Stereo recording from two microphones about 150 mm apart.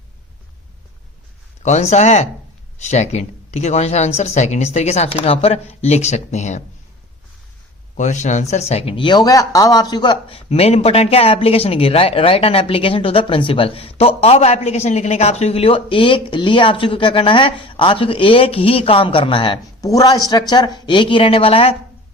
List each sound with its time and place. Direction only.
1.6 s speech: 50° left (ahead or behind)
7.9 s speech: 55° left (ahead or behind)